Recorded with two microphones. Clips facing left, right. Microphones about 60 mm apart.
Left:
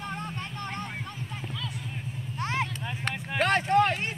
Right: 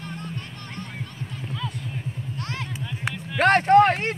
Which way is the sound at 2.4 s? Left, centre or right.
Left.